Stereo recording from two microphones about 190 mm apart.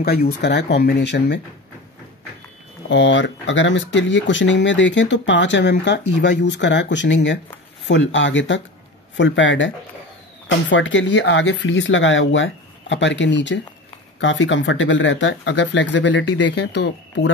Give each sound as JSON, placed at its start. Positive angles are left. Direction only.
{"t": 0.0, "sound": "speech", "side_deg": 55}
{"t": 2.9, "sound": "speech", "side_deg": 70}
{"t": 10.7, "sound": "speech", "side_deg": 75}